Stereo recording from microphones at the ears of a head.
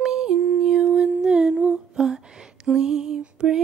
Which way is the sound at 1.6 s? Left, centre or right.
Right.